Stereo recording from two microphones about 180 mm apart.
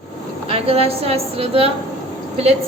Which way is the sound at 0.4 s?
30° right (ahead or behind).